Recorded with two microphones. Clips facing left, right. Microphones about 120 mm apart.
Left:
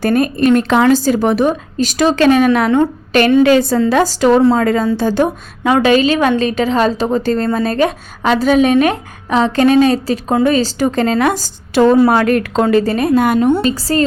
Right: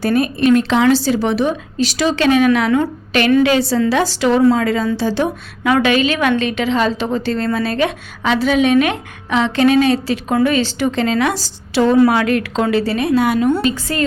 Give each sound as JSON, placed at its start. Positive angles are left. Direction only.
{"t": 0.0, "sound": "a woman's voice", "side_deg": 45}
{"t": 5.6, "sound": "a woman's voice", "side_deg": 30}
{"t": 13.7, "sound": "a woman's voice", "side_deg": 35}